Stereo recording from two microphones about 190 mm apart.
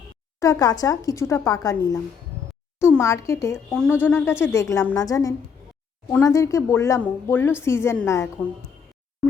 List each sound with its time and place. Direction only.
0.3 s speech: 20° left (ahead or behind)
3.7 s speech: 5° left (ahead or behind)